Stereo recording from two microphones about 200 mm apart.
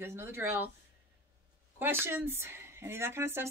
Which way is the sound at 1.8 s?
10° right (ahead or behind).